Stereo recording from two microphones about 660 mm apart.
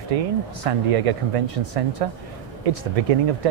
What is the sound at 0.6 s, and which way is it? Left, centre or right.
Speech, right.